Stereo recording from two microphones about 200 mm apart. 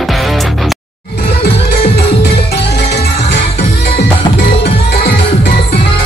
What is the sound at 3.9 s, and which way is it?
Music, 30° left (ahead or behind).